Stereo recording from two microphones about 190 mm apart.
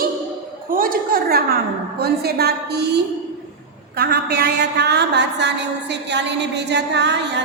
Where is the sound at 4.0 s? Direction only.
60° right (ahead or behind).